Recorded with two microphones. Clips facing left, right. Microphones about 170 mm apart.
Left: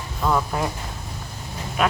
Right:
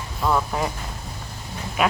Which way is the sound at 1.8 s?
5° right (ahead or behind).